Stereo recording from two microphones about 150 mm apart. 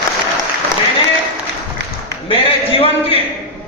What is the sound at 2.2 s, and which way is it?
Speech, 40° left (ahead or behind).